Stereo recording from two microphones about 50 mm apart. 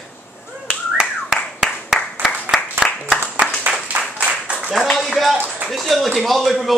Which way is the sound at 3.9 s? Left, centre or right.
Right.